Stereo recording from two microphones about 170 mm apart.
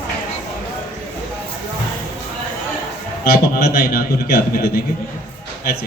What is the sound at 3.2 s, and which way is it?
A man's voice, 65° left (ahead or behind).